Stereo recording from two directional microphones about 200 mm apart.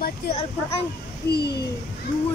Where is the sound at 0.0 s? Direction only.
35° left (ahead or behind).